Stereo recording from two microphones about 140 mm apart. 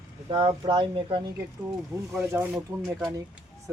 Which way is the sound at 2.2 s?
15° right (ahead or behind).